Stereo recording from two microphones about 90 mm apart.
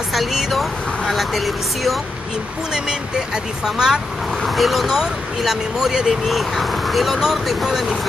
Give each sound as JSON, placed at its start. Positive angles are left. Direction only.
{"t": 0.1, "sound": "speech", "side_deg": 0}